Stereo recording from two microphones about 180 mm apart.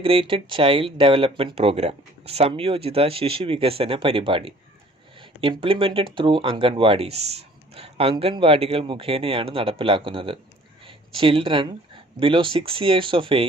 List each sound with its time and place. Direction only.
0.0 s speech: 30° right (ahead or behind)